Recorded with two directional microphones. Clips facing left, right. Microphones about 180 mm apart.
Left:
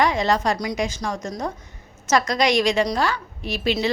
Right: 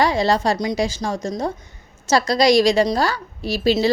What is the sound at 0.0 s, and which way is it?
A woman's voice, 30° right (ahead or behind).